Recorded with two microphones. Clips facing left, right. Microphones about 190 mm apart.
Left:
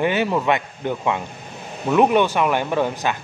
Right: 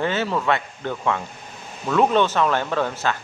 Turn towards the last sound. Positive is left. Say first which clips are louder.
# left 2 dB
turn(degrees=15)  # may be behind; listen again after turning